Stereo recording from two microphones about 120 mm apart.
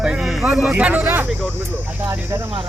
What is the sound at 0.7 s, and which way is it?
Speech, 10° right (ahead or behind).